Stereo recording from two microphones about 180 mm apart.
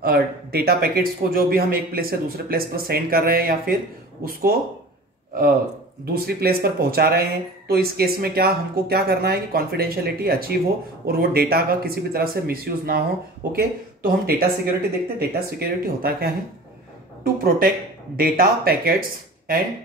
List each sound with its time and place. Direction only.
0.0 s a man's voice: 60° right (ahead or behind)
6.1 s a man's voice: 60° right (ahead or behind)